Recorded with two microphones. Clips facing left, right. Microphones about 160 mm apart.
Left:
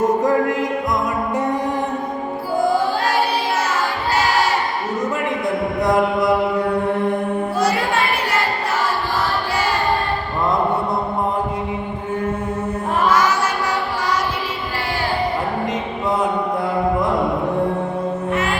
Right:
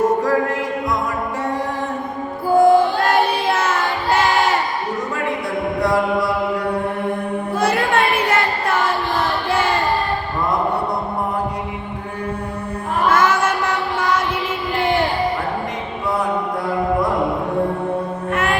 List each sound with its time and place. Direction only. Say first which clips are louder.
2.6 s music: right 6 dB; 50° right (ahead or behind)
5.8 s chant: left 1 dB; 20° left (ahead or behind)
7.6 s music: right 3 dB; 55° right (ahead or behind)
13.1 s chant: right 3 dB; 55° right (ahead or behind)